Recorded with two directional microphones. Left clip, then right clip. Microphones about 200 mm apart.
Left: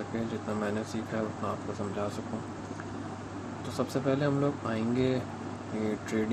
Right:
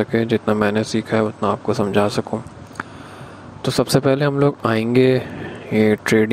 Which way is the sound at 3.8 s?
55° right (ahead or behind).